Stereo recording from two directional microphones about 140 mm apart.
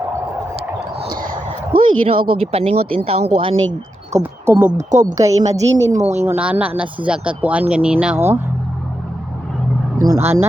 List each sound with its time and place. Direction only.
1.1 s a sound: 80° right
2.0 s speech: 45° right (ahead or behind)
4.2 s speech: 15° right (ahead or behind)
4.8 s speech: 60° right (ahead or behind)
5.1 s a woman's voice: 25° right (ahead or behind)
5.9 s speech: 55° right (ahead or behind)
6.2 s speech: 10° right (ahead or behind)
10.1 s a woman's voice: 20° right (ahead or behind)